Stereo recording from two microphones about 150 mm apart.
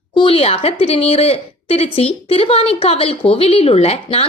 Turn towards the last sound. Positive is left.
turn(degrees=40)  # may be behind; listen again after turning